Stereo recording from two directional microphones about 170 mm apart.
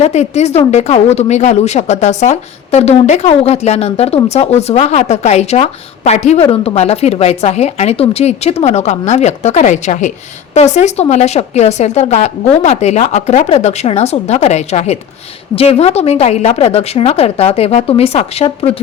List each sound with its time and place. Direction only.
0.0 s speech: 40° left (ahead or behind)